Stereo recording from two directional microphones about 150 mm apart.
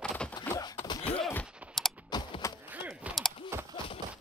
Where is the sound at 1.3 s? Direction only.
Centre (ahead or behind).